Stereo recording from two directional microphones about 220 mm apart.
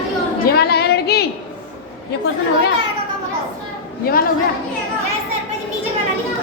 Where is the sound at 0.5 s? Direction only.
45° left (ahead or behind).